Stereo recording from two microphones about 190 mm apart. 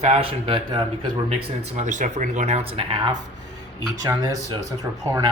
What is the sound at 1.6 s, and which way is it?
Speech, 40° right (ahead or behind).